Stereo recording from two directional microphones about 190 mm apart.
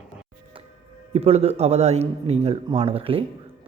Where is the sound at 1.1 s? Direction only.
35° right (ahead or behind).